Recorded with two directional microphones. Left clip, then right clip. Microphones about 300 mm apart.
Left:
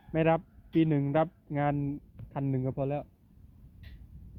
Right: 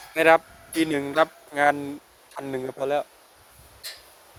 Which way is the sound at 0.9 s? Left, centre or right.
Centre.